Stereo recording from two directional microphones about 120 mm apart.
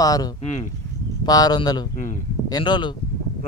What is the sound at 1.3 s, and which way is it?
Speech, 35° left (ahead or behind).